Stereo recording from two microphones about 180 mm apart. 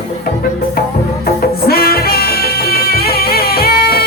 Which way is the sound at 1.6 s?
55° left (ahead or behind).